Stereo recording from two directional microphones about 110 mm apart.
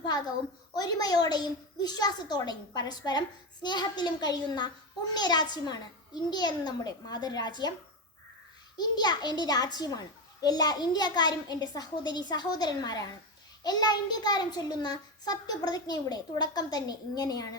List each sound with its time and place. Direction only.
0.7 s a child's voice: 35° left (ahead or behind)
8.8 s a child's voice: 40° left (ahead or behind)